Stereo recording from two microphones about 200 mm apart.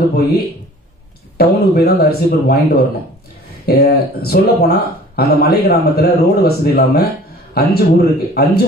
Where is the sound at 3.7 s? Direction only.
50° left (ahead or behind).